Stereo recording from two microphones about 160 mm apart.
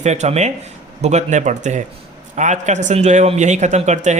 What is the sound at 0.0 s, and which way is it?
A man's voice, 45° right (ahead or behind).